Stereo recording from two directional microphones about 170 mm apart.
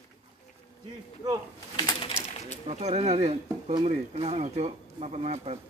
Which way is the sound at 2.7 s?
40° right (ahead or behind).